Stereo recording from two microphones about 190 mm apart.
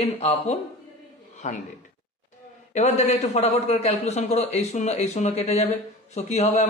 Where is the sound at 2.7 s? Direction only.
35° left (ahead or behind).